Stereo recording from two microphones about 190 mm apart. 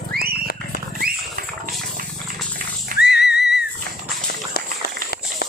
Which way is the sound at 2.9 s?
60° left (ahead or behind).